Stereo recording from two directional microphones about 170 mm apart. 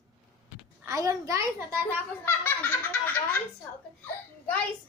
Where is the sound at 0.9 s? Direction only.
20° right (ahead or behind).